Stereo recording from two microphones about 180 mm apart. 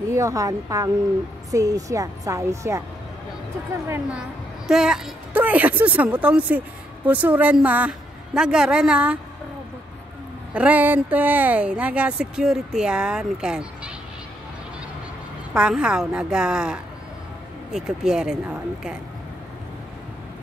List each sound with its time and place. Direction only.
0.1 s a woman's voice: 20° right (ahead or behind)
4.6 s a woman's voice: 5° right (ahead or behind)
10.5 s speech: 10° right (ahead or behind)
15.5 s a woman's voice: 5° right (ahead or behind)